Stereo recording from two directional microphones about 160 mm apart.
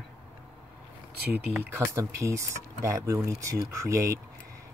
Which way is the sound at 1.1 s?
80° right.